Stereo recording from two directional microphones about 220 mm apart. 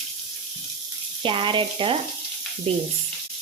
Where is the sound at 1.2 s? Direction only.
20° right (ahead or behind).